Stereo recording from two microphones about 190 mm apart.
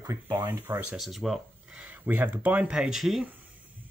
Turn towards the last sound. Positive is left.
turn(degrees=0)  # may be behind; listen again after turning